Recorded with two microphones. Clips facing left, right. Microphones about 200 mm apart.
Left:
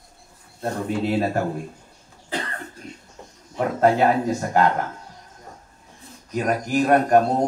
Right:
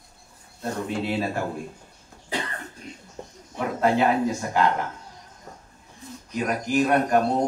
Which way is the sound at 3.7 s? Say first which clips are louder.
Left 3 dB; 45° left (ahead or behind).